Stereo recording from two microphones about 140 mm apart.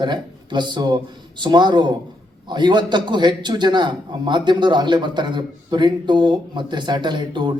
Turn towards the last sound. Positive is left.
turn(degrees=-35)  # may be behind; listen again after turning